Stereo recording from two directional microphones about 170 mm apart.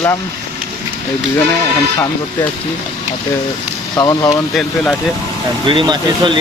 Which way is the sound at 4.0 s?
20° left (ahead or behind).